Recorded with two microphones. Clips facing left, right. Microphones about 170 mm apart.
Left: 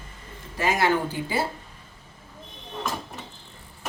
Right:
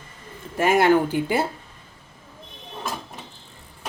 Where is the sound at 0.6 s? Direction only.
55° right (ahead or behind).